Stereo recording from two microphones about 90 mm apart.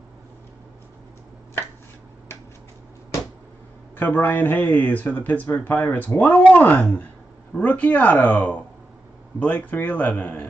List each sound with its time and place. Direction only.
4.0 s speech: 20° left (ahead or behind)